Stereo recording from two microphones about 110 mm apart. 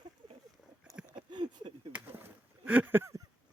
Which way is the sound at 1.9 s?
15° right (ahead or behind).